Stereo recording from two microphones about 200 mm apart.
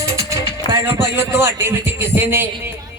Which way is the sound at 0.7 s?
20° left (ahead or behind).